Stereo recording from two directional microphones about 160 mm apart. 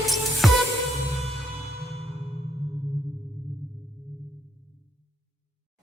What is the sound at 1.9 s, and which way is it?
Music, 40° right (ahead or behind).